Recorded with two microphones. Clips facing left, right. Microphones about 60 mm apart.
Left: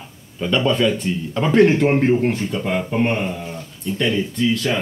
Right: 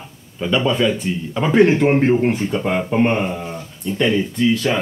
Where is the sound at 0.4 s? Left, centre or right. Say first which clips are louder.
Even; centre.